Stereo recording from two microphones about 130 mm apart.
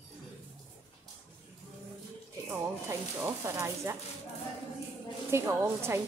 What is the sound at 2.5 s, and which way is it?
A woman's voice, 20° right (ahead or behind).